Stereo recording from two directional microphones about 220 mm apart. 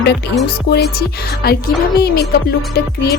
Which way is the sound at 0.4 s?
45° left (ahead or behind).